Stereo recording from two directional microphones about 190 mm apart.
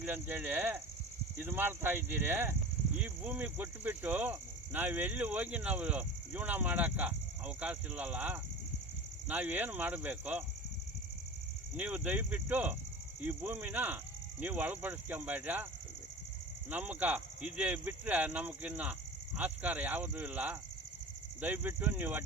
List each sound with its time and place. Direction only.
0.0 s speech: 10° right (ahead or behind)
11.8 s speech: 10° right (ahead or behind)
16.6 s speech: 10° right (ahead or behind)